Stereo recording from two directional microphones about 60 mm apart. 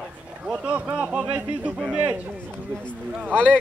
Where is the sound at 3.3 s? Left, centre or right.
Centre.